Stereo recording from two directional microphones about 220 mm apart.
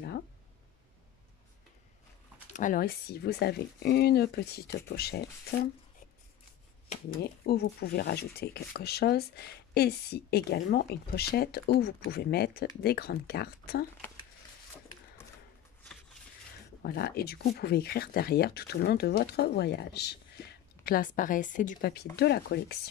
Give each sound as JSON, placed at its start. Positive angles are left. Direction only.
{"t": 2.5, "sound": "speech", "side_deg": 35}
{"t": 7.2, "sound": "speech", "side_deg": 45}
{"t": 16.8, "sound": "speech", "side_deg": 45}